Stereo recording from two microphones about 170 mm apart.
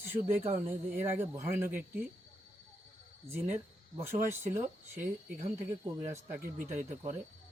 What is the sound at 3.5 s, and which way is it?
Speech, 15° right (ahead or behind).